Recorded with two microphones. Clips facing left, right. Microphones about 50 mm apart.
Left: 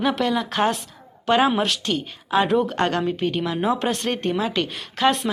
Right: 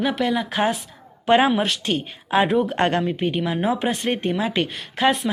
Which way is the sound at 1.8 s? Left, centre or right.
Right.